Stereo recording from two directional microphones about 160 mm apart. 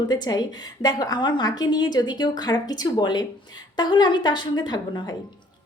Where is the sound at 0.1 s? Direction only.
25° left (ahead or behind).